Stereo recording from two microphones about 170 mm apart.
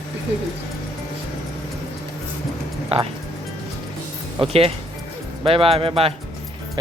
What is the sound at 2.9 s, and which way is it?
Speech, 35° right (ahead or behind).